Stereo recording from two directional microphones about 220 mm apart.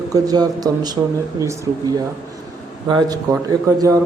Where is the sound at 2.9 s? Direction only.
20° right (ahead or behind).